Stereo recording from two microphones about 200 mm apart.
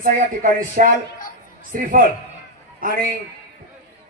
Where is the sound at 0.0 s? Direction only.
45° right (ahead or behind).